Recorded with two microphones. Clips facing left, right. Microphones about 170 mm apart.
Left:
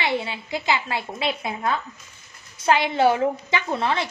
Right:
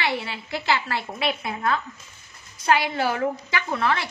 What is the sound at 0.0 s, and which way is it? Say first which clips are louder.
Speech: left 2 dB; 20° left (ahead or behind).